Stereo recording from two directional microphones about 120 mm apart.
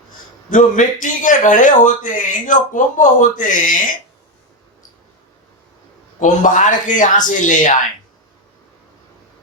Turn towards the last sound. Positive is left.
turn(degrees=90)